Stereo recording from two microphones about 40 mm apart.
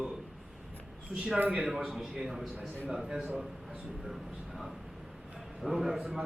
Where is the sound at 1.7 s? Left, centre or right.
Centre.